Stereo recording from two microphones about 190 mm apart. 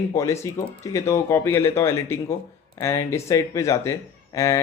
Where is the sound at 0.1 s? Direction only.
15° left (ahead or behind).